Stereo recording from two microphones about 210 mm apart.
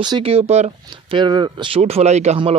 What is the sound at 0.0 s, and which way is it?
Speech, 25° right (ahead or behind).